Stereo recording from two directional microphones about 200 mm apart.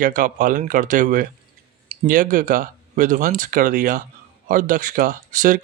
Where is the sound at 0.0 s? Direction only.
40° right (ahead or behind).